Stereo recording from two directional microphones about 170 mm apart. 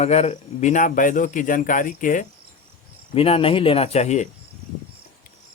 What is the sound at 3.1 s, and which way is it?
Speech, 30° left (ahead or behind).